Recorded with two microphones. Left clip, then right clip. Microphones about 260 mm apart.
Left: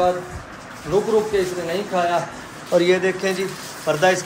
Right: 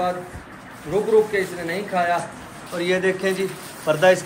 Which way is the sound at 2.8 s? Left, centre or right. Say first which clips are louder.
Left 3 dB; centre.